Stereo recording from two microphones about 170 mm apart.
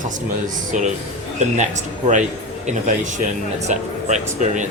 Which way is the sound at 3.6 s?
45° right (ahead or behind).